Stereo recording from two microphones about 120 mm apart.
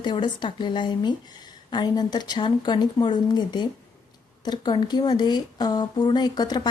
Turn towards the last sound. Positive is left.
turn(degrees=35)  # may be behind; listen again after turning